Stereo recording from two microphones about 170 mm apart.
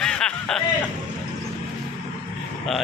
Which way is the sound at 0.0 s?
5° left (ahead or behind).